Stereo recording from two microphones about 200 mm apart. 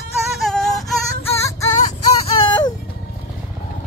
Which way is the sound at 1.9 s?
30° left (ahead or behind).